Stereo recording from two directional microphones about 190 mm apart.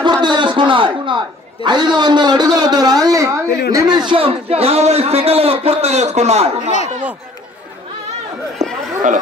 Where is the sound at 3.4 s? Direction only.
60° left (ahead or behind).